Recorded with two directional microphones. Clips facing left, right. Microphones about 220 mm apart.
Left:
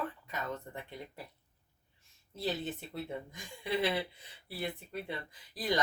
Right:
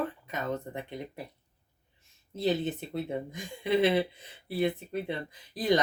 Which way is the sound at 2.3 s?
20° right (ahead or behind).